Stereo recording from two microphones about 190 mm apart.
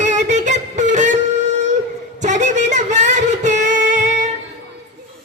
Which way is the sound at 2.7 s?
40° right (ahead or behind).